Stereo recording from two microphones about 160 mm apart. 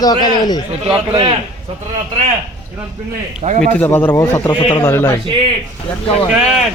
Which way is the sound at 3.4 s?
40° right (ahead or behind).